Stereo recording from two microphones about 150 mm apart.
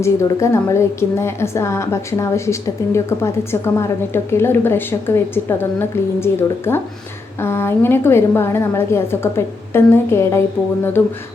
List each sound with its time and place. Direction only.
0.0 s a woman's voice: 20° left (ahead or behind)